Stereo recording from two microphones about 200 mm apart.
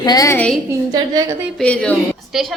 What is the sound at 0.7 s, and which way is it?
Speech, 20° right (ahead or behind).